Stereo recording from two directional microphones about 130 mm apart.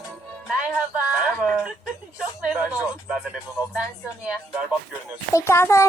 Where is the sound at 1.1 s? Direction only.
5° right (ahead or behind).